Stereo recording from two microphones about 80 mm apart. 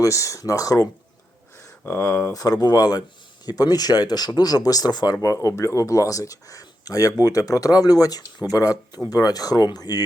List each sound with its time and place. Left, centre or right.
0.0 s speech: left
2.0 s speech: left
5.1 s speech: left